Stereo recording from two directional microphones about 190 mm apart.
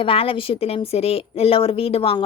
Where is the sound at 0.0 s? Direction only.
30° left (ahead or behind).